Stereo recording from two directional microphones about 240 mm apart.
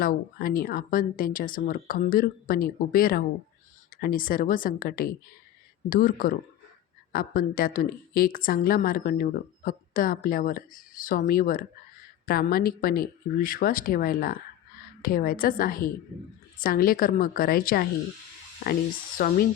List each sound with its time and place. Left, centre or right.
0.0 s a woman's voice: left